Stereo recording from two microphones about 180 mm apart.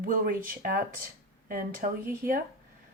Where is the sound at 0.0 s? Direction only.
50° right (ahead or behind).